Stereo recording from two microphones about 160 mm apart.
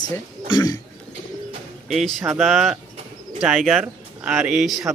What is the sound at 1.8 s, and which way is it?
Speech, centre (ahead or behind).